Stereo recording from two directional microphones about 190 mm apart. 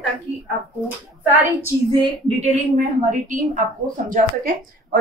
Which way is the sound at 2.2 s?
35° right (ahead or behind).